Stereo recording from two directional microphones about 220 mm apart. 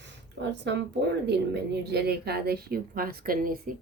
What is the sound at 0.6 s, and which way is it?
Speech, 55° right (ahead or behind).